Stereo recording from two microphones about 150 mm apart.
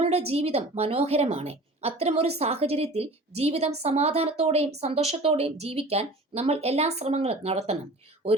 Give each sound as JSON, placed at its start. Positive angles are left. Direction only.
{"t": 0.0, "sound": "a woman's voice", "side_deg": -40}